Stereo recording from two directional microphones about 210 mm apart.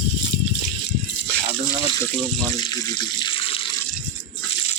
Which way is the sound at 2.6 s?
20° left (ahead or behind).